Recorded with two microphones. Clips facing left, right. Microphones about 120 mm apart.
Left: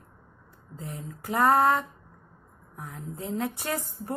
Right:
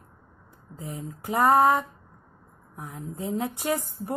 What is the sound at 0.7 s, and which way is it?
A woman's voice, 20° right (ahead or behind).